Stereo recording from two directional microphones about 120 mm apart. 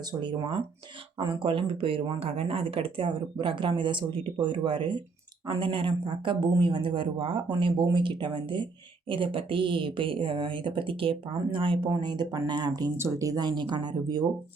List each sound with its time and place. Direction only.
0.1 s speech: 40° right (ahead or behind)